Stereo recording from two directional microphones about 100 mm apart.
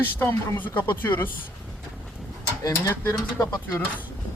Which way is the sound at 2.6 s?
30° left (ahead or behind).